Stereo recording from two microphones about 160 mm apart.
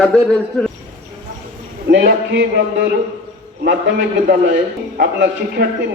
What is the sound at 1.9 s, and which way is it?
A man's voice, 90° right.